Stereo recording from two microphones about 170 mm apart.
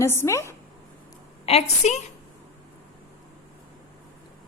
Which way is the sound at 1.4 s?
35° left (ahead or behind).